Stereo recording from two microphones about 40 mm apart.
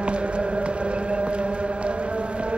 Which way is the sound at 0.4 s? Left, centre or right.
Right.